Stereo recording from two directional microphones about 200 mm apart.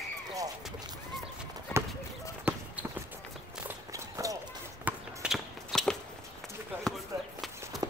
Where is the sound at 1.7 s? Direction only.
10° left (ahead or behind).